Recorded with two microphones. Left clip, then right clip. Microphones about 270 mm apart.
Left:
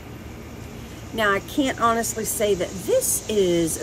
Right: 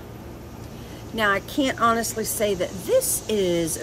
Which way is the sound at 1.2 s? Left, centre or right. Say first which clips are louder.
Even; centre.